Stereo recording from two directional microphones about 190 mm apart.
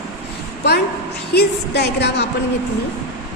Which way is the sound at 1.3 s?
60° left (ahead or behind).